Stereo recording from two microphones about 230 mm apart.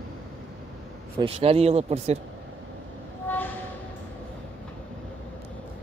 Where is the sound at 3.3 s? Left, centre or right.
Centre.